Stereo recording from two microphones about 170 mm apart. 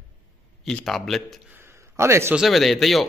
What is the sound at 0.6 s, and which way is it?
Speech, centre (ahead or behind).